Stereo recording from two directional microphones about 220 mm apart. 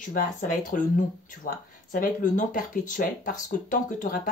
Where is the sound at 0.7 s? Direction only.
35° left (ahead or behind).